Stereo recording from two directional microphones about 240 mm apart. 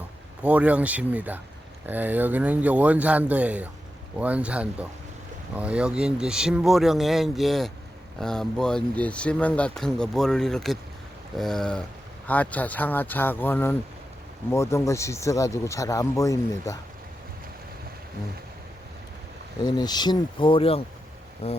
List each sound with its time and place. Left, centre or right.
0.4 s speech: centre
19.6 s speech: centre
21.4 s a sound: left